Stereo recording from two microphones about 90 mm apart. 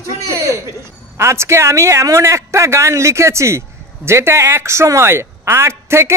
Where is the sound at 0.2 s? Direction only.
35° right (ahead or behind).